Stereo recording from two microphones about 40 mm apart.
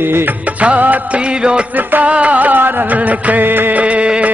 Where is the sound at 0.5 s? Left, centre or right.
Right.